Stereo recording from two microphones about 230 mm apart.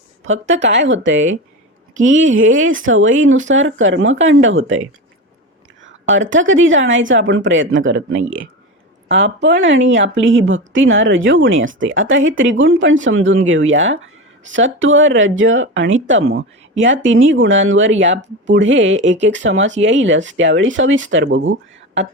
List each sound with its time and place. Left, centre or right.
0.4 s speech: right